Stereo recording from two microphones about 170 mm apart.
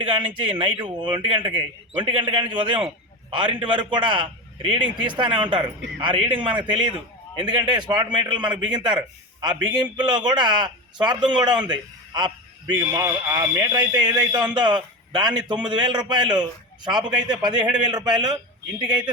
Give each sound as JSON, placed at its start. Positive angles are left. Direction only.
{"t": 0.0, "sound": "a man's voice", "side_deg": -30}
{"t": 17.5, "sound": "a man's voice", "side_deg": -5}
{"t": 17.9, "sound": "a man's voice", "side_deg": -25}